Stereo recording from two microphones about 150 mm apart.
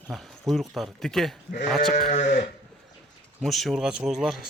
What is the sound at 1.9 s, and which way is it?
Sheep, 80° left.